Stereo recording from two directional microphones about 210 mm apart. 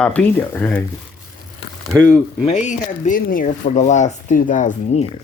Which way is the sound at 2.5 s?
30° left (ahead or behind).